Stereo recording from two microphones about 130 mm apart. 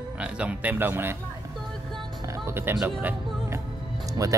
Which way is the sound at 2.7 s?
15° right (ahead or behind).